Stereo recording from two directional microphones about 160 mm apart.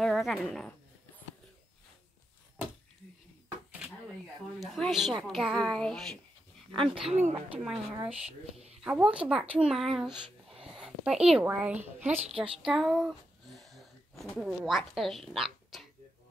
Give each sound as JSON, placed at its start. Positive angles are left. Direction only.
{"t": 0.0, "sound": "a woman's voice", "side_deg": 0}
{"t": 4.6, "sound": "speech", "side_deg": 0}
{"t": 7.3, "sound": "a woman's voice", "side_deg": -5}
{"t": 12.2, "sound": "a woman's voice", "side_deg": -40}
{"t": 12.6, "sound": "a sound", "side_deg": 0}
{"t": 14.3, "sound": "speech", "side_deg": 0}